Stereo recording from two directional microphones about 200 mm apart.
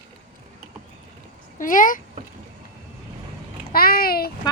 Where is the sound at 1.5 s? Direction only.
40° left (ahead or behind).